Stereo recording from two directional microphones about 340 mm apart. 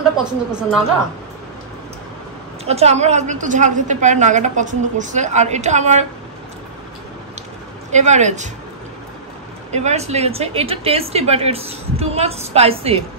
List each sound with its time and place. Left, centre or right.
0.2 s a woman's voice: centre
2.6 s a woman's voice: centre
7.9 s a woman's voice: right
9.7 s a woman's voice: centre